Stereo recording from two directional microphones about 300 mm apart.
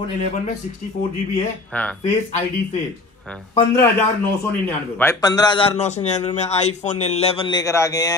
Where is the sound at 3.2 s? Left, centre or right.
Centre.